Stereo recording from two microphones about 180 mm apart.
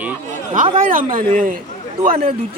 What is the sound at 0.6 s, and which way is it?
Speech, 45° right (ahead or behind).